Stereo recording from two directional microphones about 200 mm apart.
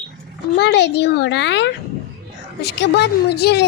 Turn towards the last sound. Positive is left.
turn(degrees=55)  # may be behind; listen again after turning